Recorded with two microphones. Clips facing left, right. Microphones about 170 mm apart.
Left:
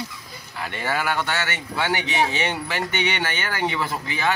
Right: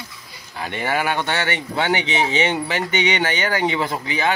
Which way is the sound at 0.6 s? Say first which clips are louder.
Right 3 dB; 20° right (ahead or behind).